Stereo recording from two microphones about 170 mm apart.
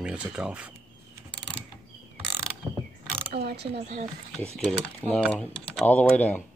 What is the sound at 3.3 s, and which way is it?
Speech, 65° right (ahead or behind).